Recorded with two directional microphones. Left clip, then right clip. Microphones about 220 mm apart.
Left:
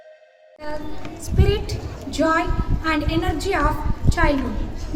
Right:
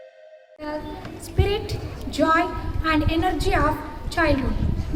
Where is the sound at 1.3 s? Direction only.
Centre (ahead or behind).